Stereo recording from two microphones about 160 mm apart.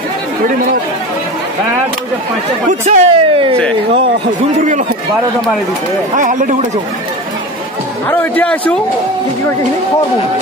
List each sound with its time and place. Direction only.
2.8 s speech: 40° right (ahead or behind)
6.1 s speech: 55° right (ahead or behind)
8.1 s a man's voice: 10° left (ahead or behind)